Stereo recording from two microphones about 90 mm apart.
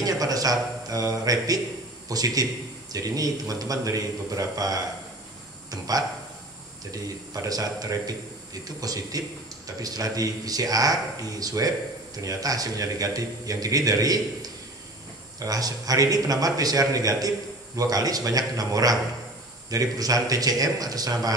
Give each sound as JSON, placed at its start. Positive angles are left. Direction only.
{"t": 0.0, "sound": "a man's voice", "side_deg": -45}
{"t": 15.3, "sound": "speech", "side_deg": -40}